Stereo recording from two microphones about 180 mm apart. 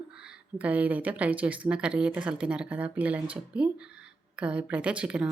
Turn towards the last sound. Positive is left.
turn(degrees=-5)  # may be behind; listen again after turning